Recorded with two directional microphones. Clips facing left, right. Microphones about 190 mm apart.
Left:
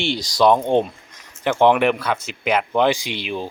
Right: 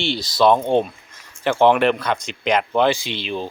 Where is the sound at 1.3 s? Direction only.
15° left (ahead or behind).